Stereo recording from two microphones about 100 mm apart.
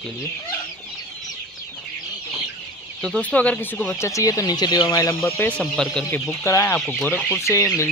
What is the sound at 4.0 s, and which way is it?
Speech, 30° left (ahead or behind).